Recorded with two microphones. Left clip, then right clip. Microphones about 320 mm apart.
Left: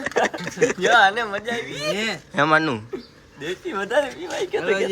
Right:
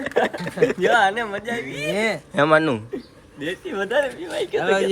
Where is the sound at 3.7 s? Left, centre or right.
Centre.